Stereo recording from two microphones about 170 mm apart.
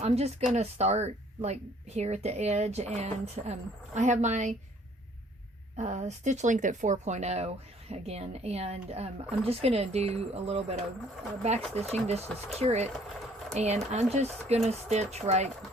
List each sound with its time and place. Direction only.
0.0 s speech: 40° right (ahead or behind)
5.7 s speech: 40° right (ahead or behind)